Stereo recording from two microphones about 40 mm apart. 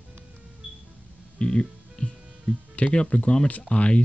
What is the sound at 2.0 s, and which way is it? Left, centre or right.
Music, left.